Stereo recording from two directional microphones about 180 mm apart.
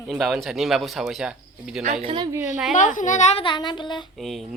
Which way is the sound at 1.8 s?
35° right (ahead or behind).